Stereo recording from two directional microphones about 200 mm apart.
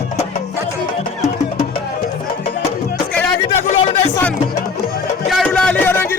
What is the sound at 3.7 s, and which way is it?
Music, 35° left (ahead or behind).